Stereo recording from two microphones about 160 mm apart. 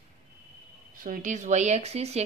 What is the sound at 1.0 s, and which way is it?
Speech, 55° right (ahead or behind).